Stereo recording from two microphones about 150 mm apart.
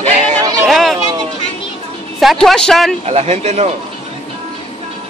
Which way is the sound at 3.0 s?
45° right (ahead or behind).